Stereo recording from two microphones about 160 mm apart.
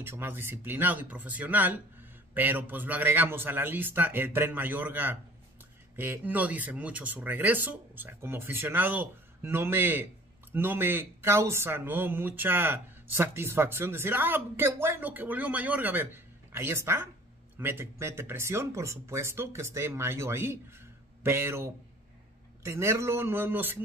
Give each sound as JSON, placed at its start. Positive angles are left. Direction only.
{"t": 0.0, "sound": "speech", "side_deg": -15}